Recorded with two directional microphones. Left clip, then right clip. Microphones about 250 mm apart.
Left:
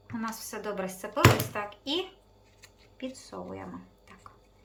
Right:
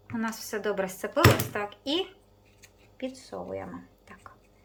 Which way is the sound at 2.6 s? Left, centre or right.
Centre.